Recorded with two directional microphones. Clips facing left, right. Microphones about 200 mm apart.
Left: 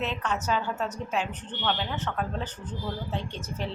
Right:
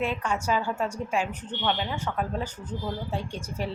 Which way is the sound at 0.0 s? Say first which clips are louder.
Right 2 dB; 10° right (ahead or behind).